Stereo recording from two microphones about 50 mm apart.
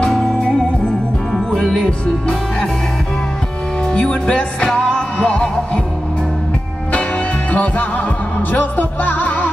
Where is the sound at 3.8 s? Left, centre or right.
Left.